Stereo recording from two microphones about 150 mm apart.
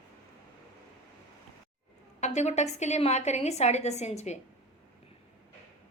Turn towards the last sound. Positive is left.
turn(degrees=50)  # may be behind; listen again after turning